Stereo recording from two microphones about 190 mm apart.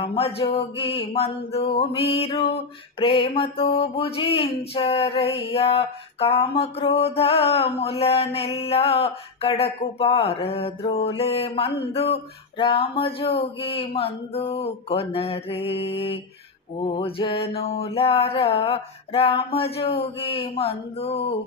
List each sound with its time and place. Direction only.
0.0 s mantra: 30° left (ahead or behind)